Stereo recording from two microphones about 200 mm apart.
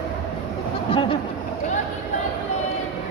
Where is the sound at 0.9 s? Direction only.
25° left (ahead or behind).